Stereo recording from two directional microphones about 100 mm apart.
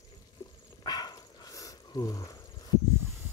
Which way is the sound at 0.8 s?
40° left (ahead or behind).